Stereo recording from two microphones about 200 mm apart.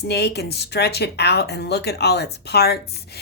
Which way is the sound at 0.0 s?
55° left (ahead or behind).